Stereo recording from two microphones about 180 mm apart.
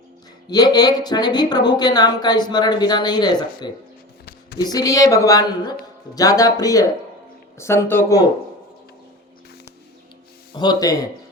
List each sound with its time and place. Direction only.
0.5 s speech: 20° left (ahead or behind)
4.3 s a sound: 65° left (ahead or behind)
4.6 s speech: 20° left (ahead or behind)
10.5 s speech: 25° left (ahead or behind)